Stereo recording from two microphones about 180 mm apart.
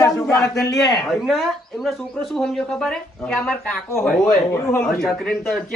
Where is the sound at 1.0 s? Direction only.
Centre (ahead or behind).